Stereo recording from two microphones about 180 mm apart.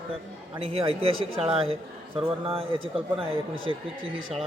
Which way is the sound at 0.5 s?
30° right (ahead or behind).